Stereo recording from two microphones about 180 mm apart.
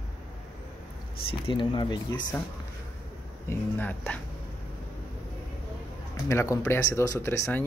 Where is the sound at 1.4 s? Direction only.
25° left (ahead or behind).